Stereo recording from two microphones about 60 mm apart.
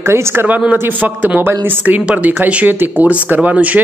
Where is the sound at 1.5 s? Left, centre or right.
Right.